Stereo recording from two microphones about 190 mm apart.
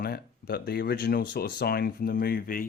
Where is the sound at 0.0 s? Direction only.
55° left (ahead or behind).